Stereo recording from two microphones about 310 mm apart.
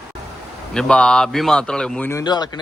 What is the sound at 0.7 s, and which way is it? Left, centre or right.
A man's voice, centre.